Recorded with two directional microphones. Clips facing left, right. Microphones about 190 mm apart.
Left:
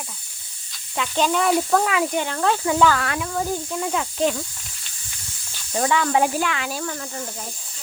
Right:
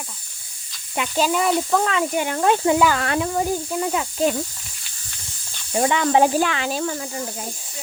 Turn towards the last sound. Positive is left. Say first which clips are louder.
# right 3 dB
turn(degrees=-10)  # may be behind; listen again after turning